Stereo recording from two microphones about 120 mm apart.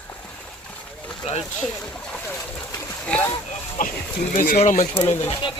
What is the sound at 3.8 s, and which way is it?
Speech, 90° left.